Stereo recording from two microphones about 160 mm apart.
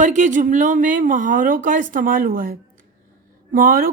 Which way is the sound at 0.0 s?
50° right (ahead or behind).